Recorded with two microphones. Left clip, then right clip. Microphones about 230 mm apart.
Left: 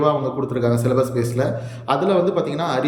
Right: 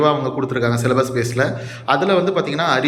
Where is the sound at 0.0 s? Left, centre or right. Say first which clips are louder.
Right 2 dB; centre.